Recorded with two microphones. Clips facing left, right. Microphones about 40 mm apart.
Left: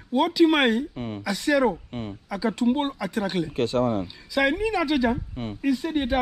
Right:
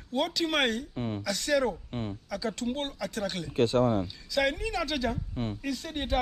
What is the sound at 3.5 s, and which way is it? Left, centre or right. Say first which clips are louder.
Speech: right 1 dB; left.